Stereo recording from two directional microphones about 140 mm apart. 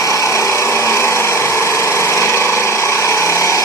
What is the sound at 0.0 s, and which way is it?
Tools, 25° left (ahead or behind).